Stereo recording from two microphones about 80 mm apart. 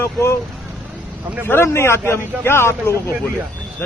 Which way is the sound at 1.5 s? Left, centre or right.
Left.